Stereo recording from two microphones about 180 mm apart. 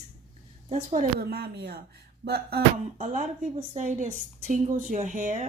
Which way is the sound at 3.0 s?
45° right (ahead or behind).